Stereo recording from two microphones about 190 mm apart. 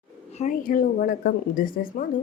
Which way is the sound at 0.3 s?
40° left (ahead or behind).